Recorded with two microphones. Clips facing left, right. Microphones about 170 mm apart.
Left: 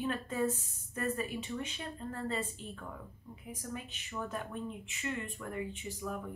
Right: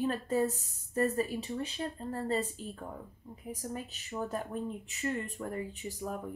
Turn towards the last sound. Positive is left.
turn(degrees=-40)  # may be behind; listen again after turning